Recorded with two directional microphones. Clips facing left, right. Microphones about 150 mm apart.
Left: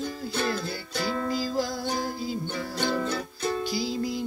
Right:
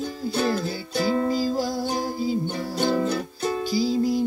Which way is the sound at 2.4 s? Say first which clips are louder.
Right 5 dB; 35° right (ahead or behind).